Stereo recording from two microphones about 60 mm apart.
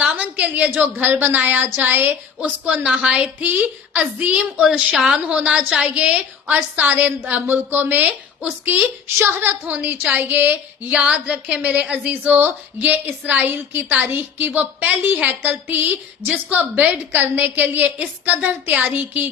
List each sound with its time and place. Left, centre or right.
0.0 s a woman's voice: right
2.6 s a woman's voice: centre; by 9.6 s right
9.6 s speech: right
12.1 s a woman's voice: right